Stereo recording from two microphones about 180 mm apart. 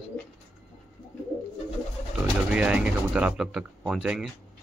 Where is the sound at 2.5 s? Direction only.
5° right (ahead or behind).